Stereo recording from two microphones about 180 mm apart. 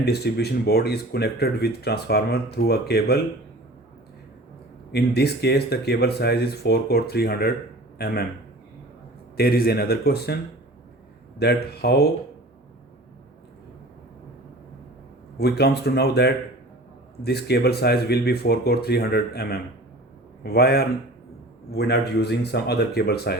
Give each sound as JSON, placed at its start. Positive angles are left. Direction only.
{"t": 0.0, "sound": "speech", "side_deg": 60}
{"t": 4.9, "sound": "speech", "side_deg": 65}
{"t": 9.4, "sound": "speech", "side_deg": 55}
{"t": 11.3, "sound": "speech", "side_deg": 60}
{"t": 15.4, "sound": "speech", "side_deg": 65}